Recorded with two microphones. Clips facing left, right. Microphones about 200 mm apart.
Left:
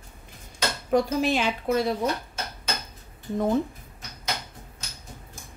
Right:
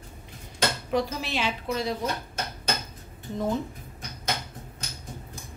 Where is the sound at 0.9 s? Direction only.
50° left (ahead or behind).